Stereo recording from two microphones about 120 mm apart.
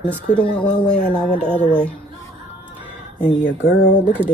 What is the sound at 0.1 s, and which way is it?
Speech, 10° left (ahead or behind).